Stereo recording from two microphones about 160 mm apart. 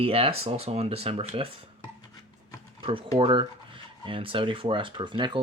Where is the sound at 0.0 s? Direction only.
35° right (ahead or behind).